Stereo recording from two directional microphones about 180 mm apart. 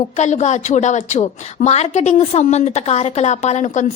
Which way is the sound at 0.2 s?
40° left (ahead or behind).